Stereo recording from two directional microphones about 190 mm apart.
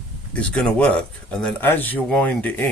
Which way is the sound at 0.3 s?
5° left (ahead or behind).